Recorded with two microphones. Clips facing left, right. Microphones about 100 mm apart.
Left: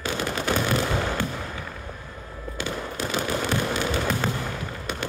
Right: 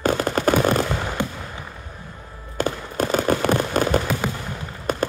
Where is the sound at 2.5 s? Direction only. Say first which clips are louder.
Right 7 dB; 50° right (ahead or behind).